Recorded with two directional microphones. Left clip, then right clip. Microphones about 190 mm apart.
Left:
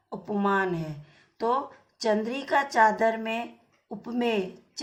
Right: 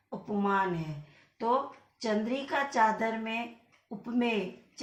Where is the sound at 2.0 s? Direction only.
55° left (ahead or behind).